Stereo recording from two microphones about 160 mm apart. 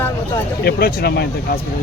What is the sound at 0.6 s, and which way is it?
Speech, 75° left (ahead or behind).